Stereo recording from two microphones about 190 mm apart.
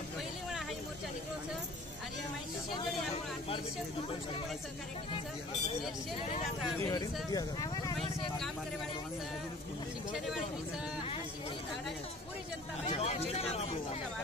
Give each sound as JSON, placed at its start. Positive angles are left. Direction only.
{"t": 6.8, "sound": "speech", "side_deg": 20}
{"t": 12.8, "sound": "speech", "side_deg": 35}